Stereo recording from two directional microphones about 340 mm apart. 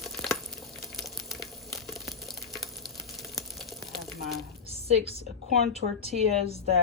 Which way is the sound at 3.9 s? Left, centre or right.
Centre.